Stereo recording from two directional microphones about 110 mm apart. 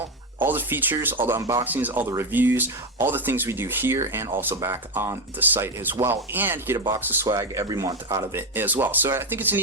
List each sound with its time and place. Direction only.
0.3 s speech: 20° right (ahead or behind)
1.4 s speech: 30° right (ahead or behind)
1.6 s speech: 15° right (ahead or behind)